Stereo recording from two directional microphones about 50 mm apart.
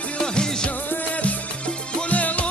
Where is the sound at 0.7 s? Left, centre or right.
Left.